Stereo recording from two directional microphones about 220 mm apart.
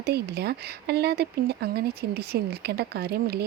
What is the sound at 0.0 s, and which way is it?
Speech, 45° right (ahead or behind).